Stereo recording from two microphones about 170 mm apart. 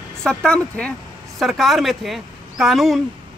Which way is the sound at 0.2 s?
5° left (ahead or behind).